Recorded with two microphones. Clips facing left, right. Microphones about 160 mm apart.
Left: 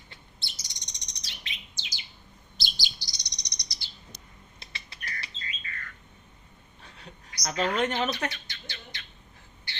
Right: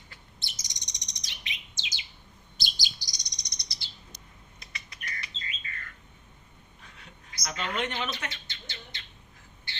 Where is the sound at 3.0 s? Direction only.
45° right (ahead or behind).